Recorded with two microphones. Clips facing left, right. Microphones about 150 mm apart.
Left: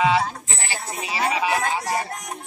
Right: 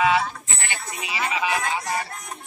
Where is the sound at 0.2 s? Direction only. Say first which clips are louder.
Left 2 dB; 35° left (ahead or behind).